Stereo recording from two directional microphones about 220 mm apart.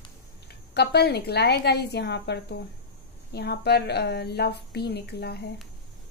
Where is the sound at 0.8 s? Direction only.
50° left (ahead or behind).